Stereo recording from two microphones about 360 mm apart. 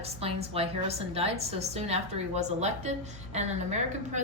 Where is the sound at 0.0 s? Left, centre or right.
Centre.